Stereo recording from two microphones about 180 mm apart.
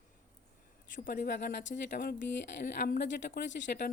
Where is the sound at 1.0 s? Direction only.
55° left (ahead or behind); by 1.8 s 70° left (ahead or behind).